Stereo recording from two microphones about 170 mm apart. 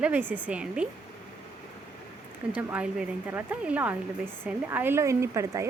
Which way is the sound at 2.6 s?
10° right (ahead or behind).